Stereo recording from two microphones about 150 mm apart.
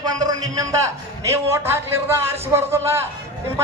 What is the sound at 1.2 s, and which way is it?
Speech, 20° right (ahead or behind).